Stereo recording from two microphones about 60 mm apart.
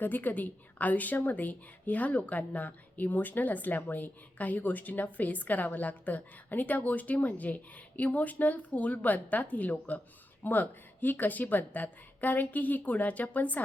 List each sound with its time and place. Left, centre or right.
0.0 s a woman's voice: left